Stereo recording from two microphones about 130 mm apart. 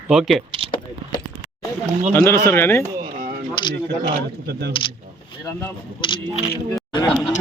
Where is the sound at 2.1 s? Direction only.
20° left (ahead or behind).